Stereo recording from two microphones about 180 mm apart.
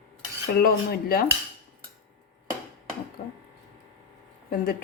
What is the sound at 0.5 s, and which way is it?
Speech, 55° left (ahead or behind).